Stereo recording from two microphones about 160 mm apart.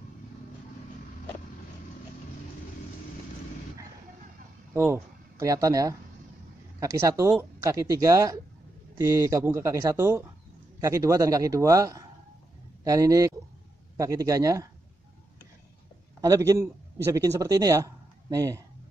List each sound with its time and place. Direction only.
4.7 s a man's voice: 15° right (ahead or behind)
16.2 s a man's voice: 20° right (ahead or behind)